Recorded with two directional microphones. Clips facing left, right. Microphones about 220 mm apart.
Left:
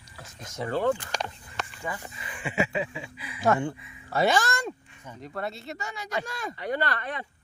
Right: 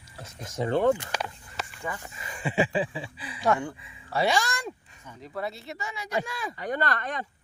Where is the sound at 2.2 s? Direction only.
40° right (ahead or behind).